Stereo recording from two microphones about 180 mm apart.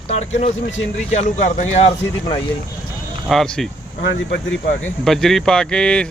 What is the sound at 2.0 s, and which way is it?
Speech, 25° left (ahead or behind).